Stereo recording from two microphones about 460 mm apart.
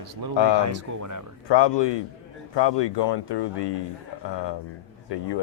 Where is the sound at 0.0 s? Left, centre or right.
Right.